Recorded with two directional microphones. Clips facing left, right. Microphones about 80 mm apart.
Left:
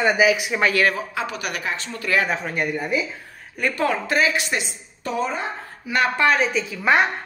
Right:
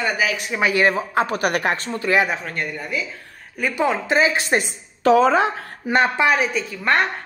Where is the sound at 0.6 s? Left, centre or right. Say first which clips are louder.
Right 4 dB; centre.